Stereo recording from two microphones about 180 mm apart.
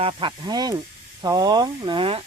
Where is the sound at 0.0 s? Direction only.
30° right (ahead or behind).